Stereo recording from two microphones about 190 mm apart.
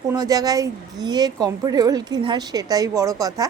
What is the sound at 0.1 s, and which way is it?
A woman's voice, 20° right (ahead or behind).